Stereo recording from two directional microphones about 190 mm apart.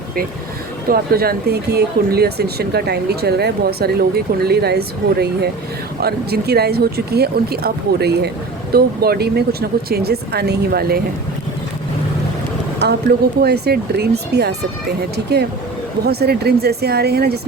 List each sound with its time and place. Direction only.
0.9 s speech: 50° right (ahead or behind)
12.8 s speech: 60° right (ahead or behind)